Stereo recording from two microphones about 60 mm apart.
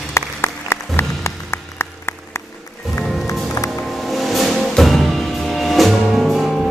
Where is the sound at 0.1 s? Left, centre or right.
Left.